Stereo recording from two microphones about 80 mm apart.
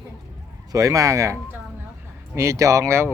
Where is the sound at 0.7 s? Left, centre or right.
Right.